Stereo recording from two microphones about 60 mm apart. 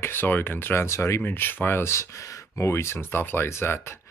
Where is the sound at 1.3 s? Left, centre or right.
Left.